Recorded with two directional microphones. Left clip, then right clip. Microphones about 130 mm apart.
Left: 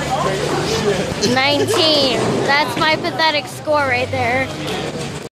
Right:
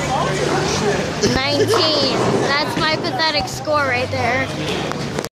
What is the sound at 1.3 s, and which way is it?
Speech, 20° left (ahead or behind).